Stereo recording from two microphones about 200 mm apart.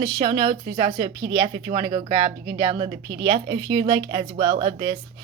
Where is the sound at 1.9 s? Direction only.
25° right (ahead or behind).